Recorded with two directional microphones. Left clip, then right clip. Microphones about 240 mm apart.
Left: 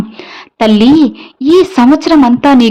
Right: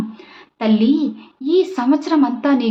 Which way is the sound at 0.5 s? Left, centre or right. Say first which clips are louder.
Left 10 dB; left.